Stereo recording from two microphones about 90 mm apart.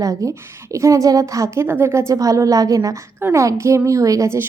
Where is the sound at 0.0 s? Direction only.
40° right (ahead or behind).